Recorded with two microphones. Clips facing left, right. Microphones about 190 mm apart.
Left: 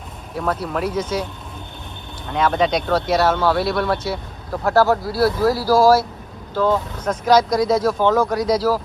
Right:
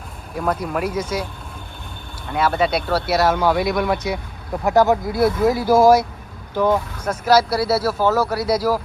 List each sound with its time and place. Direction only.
0.3 s speech: 10° right (ahead or behind)